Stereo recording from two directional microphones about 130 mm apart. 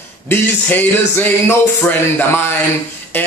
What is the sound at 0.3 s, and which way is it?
Speech, 15° left (ahead or behind).